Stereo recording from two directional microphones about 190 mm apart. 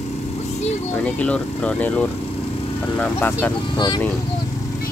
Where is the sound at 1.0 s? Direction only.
5° left (ahead or behind).